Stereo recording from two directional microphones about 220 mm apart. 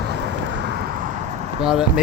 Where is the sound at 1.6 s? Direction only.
5° right (ahead or behind).